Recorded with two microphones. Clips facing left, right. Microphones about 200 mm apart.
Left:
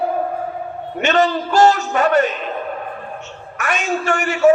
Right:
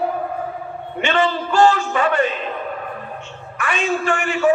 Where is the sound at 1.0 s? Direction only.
40° left (ahead or behind).